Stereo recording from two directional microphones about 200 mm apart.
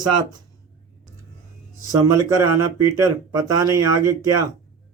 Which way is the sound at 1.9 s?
15° right (ahead or behind).